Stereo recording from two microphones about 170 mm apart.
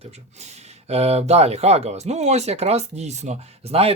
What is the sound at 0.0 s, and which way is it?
Speech, 40° right (ahead or behind).